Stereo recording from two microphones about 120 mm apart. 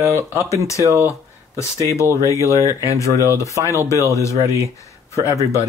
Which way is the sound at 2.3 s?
25° left (ahead or behind).